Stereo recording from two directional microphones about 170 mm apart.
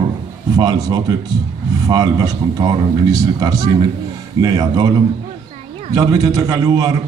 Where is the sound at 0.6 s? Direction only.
20° right (ahead or behind).